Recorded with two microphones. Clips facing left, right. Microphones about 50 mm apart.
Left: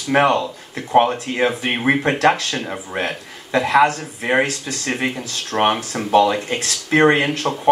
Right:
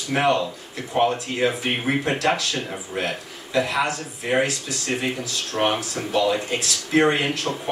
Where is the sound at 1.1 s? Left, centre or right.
Left.